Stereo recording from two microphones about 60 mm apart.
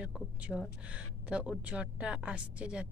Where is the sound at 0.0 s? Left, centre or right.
Centre.